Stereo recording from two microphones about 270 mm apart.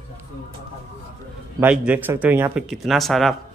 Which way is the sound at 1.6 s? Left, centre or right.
Centre.